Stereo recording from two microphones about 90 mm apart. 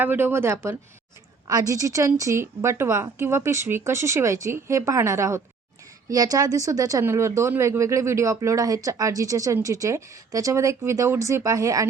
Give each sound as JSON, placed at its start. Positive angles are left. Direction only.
{"t": 0.0, "sound": "speech", "side_deg": -25}
{"t": 1.5, "sound": "a woman's voice", "side_deg": -40}